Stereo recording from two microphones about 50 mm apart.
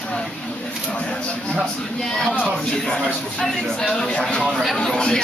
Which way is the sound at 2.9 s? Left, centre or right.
Centre.